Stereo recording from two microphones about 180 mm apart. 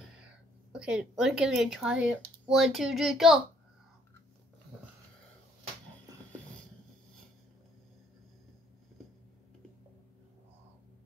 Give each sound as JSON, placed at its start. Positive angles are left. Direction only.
{"t": 0.7, "sound": "speech", "side_deg": -5}